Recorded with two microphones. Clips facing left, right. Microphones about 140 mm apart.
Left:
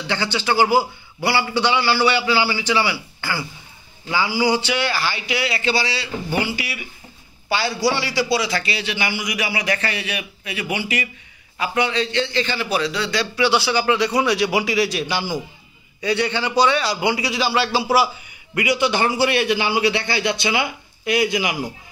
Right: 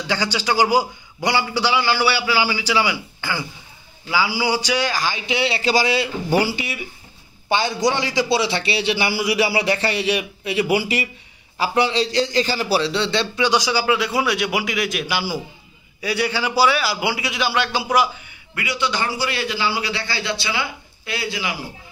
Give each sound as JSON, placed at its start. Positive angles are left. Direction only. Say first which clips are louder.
{"t": 0.0, "sound": "a man's voice", "louder": "even", "side_deg": -10}
{"t": 7.4, "sound": "a man's voice", "louder": "right 1 dB", "side_deg": -20}
{"t": 13.5, "sound": "a man's voice", "louder": "even", "side_deg": -15}
{"t": 18.5, "sound": "a man's voice", "louder": "left 5 dB", "side_deg": 20}